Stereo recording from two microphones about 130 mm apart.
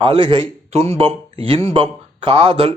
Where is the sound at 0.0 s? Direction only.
40° right (ahead or behind).